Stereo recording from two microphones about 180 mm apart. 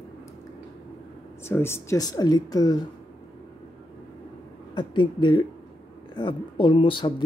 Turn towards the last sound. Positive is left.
turn(degrees=30)  # may be behind; listen again after turning